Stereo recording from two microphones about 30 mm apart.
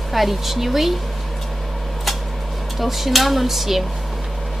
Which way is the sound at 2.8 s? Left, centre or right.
Centre.